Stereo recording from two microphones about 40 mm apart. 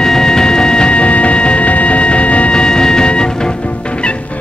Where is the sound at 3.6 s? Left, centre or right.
Left.